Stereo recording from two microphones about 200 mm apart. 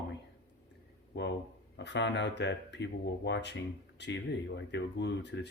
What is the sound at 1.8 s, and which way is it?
Speech, 60° left (ahead or behind).